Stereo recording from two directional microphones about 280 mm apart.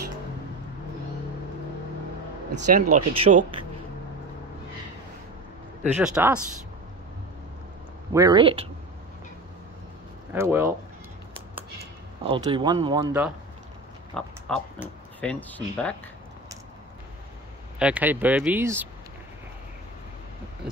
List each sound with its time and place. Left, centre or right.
2.5 s speech: right
5.9 s speech: centre
8.1 s speech: centre
10.3 s speech: centre
12.2 s speech: centre
14.1 s speech: centre
17.7 s speech: centre